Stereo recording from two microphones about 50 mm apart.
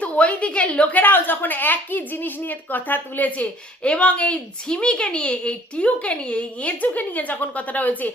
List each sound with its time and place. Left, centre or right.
0.0 s a woman's voice: left
0.9 s a woman's voice: left